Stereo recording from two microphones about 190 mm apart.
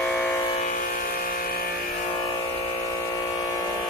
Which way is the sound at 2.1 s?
30° left (ahead or behind).